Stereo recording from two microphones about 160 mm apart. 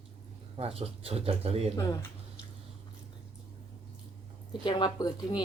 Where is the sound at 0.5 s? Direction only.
35° right (ahead or behind).